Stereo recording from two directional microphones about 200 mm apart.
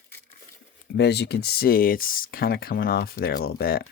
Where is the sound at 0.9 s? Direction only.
55° left (ahead or behind).